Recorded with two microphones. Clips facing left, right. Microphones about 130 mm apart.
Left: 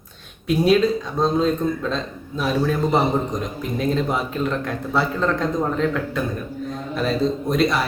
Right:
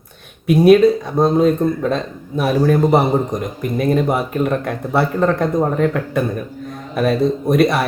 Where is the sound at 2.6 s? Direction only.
45° right (ahead or behind).